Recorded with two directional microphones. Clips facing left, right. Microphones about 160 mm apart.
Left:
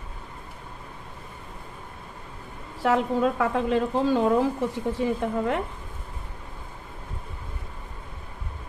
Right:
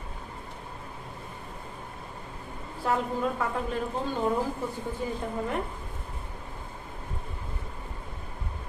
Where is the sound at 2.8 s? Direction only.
90° left.